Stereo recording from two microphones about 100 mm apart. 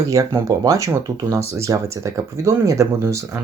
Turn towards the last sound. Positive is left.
turn(degrees=-30)  # may be behind; listen again after turning